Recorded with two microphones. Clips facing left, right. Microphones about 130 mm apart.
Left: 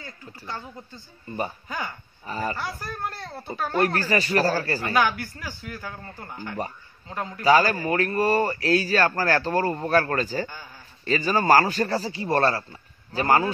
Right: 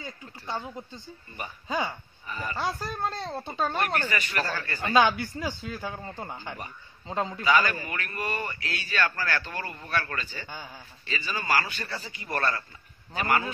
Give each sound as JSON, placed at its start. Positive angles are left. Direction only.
{"t": 0.0, "sound": "a man's voice", "side_deg": -15}
{"t": 2.2, "sound": "speech", "side_deg": 35}
{"t": 2.5, "sound": "a man's voice", "side_deg": -20}
{"t": 3.8, "sound": "a man's voice", "side_deg": 35}
{"t": 4.9, "sound": "a man's voice", "side_deg": -20}
{"t": 7.4, "sound": "a man's voice", "side_deg": 35}